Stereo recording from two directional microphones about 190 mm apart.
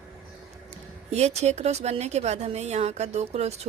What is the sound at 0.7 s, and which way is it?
Speech, 35° right (ahead or behind).